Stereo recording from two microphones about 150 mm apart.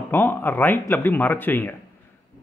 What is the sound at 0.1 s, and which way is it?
Speech, 15° left (ahead or behind).